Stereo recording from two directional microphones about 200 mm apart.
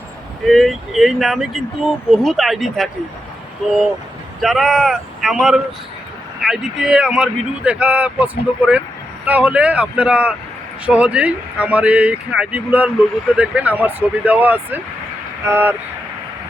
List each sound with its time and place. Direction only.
0.4 s speech: centre (ahead or behind)
4.4 s speech: centre (ahead or behind)